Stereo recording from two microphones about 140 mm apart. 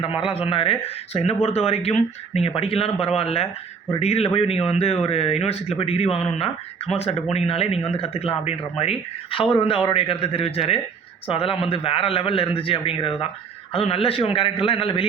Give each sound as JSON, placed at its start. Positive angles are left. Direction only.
{"t": 0.2, "sound": "a man's voice", "side_deg": 40}